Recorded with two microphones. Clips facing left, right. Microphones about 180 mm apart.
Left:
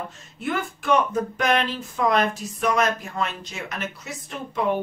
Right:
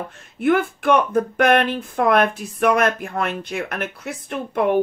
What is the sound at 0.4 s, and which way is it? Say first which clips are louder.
Speech: right 9 dB; 60° right (ahead or behind).